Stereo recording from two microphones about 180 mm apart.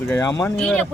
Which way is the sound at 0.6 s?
5° left (ahead or behind).